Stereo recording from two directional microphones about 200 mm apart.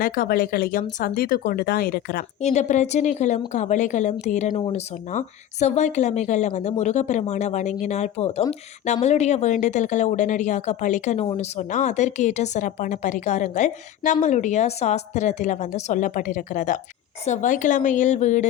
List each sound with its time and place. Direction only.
0.0 s speech: 45° left (ahead or behind)
2.4 s speech: 35° left (ahead or behind)